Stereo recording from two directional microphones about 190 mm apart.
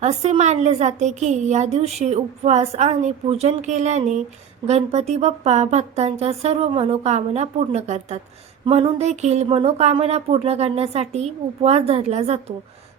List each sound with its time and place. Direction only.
0.0 s speech: 35° right (ahead or behind)